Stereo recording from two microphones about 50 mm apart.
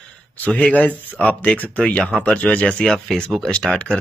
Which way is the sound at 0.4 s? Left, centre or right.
Left.